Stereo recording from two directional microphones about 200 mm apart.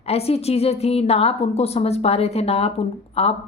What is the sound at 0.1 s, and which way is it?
A woman's voice, 30° left (ahead or behind).